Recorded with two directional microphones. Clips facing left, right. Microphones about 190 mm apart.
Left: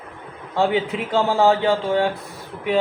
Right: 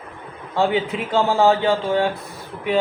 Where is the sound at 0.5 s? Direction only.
60° left (ahead or behind).